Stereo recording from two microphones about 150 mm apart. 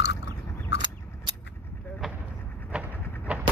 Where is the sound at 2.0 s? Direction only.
Centre (ahead or behind).